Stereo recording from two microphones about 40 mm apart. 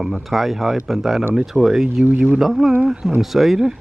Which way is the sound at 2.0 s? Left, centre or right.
Right.